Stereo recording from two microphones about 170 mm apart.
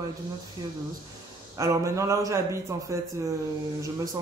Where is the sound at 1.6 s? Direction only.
15° right (ahead or behind).